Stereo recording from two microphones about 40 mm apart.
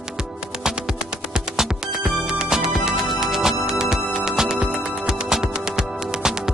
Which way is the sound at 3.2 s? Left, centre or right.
Centre.